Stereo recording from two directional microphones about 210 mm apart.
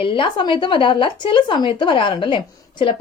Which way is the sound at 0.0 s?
25° left (ahead or behind).